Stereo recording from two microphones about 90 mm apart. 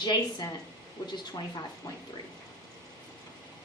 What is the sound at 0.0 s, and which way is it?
Speech, 55° left (ahead or behind).